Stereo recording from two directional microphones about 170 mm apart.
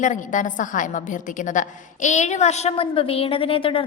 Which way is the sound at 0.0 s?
50° left (ahead or behind).